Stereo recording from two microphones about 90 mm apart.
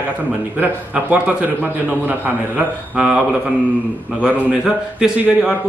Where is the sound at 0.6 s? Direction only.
15° right (ahead or behind).